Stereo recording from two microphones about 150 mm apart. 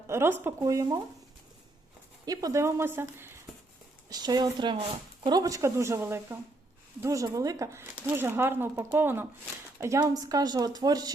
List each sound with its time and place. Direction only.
0.1 s speech: 15° right (ahead or behind)
2.2 s speech: 25° right (ahead or behind)
4.1 s a woman's voice: 25° right (ahead or behind)